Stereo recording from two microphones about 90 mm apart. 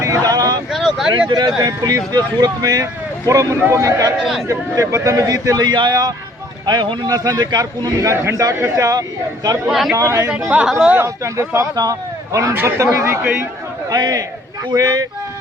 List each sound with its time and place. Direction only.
0.0 s vehicle: 40° right (ahead or behind)
0.7 s a sound: centre (ahead or behind)
1.3 s speech: 50° right (ahead or behind)
4.2 s a man's voice: centre (ahead or behind)
4.4 s speech: 35° right (ahead or behind)
6.7 s speech: 60° right (ahead or behind)
7.1 s speech: 50° right (ahead or behind)
9.6 s a man's voice: 5° right (ahead or behind)
9.9 s speech: 30° right (ahead or behind)
10.7 s speech: 10° right (ahead or behind)
10.9 s speech: 30° right (ahead or behind)
13.9 s speech: 45° right (ahead or behind)